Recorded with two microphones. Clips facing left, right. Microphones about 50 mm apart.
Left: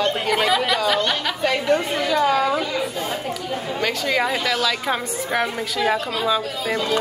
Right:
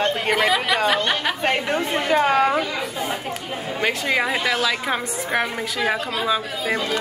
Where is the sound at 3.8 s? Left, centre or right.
Right.